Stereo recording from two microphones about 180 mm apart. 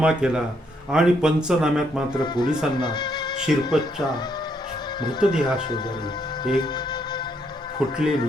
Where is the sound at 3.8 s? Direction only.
25° left (ahead or behind).